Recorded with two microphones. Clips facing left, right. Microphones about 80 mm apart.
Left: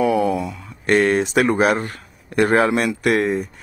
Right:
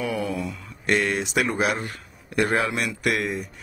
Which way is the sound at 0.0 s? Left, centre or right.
Left.